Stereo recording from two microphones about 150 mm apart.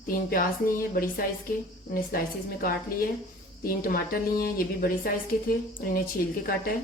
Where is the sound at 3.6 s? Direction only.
75° left (ahead or behind).